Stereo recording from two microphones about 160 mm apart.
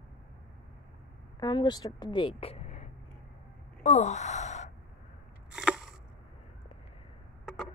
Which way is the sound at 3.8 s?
45° left (ahead or behind).